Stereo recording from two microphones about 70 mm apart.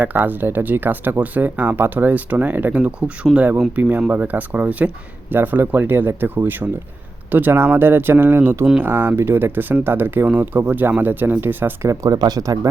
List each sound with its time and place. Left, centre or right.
0.0 s speech: right
12.0 s speech: right